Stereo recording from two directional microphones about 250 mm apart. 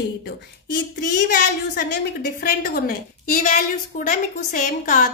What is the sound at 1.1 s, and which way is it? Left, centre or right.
A woman's voice, left.